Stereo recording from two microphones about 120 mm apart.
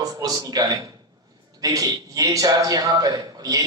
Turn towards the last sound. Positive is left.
turn(degrees=-30)  # may be behind; listen again after turning